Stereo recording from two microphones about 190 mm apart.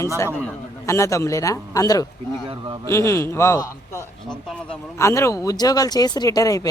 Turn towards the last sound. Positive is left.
turn(degrees=20)  # may be behind; listen again after turning